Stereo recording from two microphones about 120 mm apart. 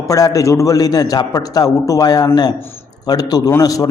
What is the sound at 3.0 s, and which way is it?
Speech, 35° left (ahead or behind).